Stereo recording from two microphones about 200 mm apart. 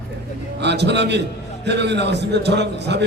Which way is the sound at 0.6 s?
60° right (ahead or behind).